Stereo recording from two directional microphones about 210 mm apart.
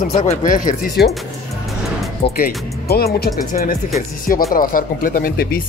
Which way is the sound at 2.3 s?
45° left (ahead or behind).